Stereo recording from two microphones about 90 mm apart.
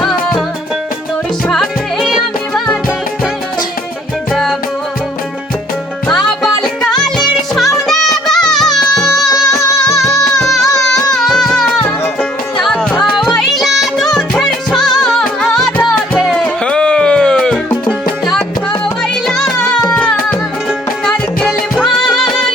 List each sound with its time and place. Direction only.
0.0 s music: 5° left (ahead or behind)
1.5 s music: centre (ahead or behind)
4.3 s music: 5° left (ahead or behind)
6.1 s music: 5° left (ahead or behind)
9.3 s music: 40° left (ahead or behind)
10.4 s music: 5° left (ahead or behind)
12.6 s music: 10° left (ahead or behind)
22.1 s music: 5° left (ahead or behind)